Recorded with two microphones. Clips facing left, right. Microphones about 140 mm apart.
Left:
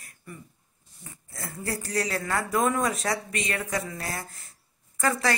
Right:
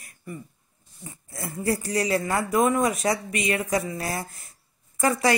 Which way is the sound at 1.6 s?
20° right (ahead or behind).